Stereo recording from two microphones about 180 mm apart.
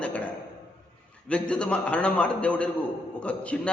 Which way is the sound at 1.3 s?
5° left (ahead or behind).